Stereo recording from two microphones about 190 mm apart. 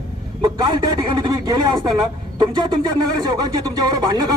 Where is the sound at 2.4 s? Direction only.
20° right (ahead or behind).